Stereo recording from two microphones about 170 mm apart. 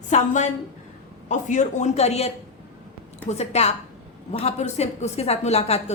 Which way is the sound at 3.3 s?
40° left (ahead or behind).